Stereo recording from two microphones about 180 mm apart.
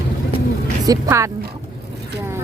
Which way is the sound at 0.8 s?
20° right (ahead or behind).